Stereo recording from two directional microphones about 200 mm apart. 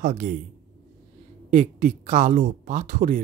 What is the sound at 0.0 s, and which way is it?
Speech, 45° right (ahead or behind).